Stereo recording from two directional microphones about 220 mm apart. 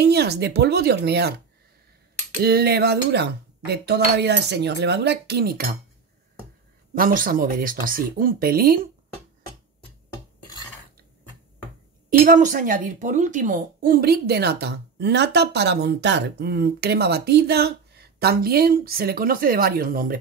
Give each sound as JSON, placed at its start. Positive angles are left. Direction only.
{"t": 0.0, "sound": "speech", "side_deg": -50}
{"t": 2.4, "sound": "speech", "side_deg": -45}
{"t": 7.0, "sound": "speech", "side_deg": -40}
{"t": 12.1, "sound": "speech", "side_deg": -35}